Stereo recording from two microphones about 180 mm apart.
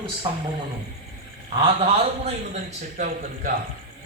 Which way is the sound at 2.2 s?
40° right (ahead or behind).